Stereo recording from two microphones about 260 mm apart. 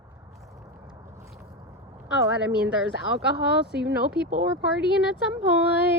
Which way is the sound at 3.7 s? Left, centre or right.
Right.